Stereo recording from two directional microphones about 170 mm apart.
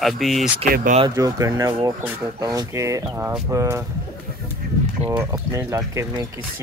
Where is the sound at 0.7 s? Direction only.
60° right (ahead or behind).